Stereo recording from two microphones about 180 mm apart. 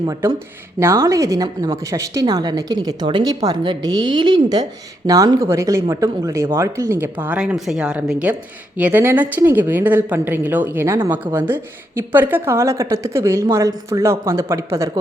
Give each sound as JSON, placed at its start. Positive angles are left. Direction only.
{"t": 0.0, "sound": "a woman's voice", "side_deg": -20}